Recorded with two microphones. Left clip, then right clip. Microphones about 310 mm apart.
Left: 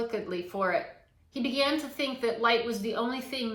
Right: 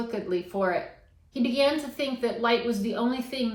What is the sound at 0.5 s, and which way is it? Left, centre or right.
Speech, centre.